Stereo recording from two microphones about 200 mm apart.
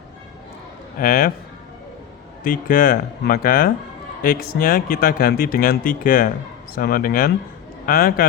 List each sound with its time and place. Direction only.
0.9 s speech: 45° left (ahead or behind)
2.4 s speech: 45° left (ahead or behind)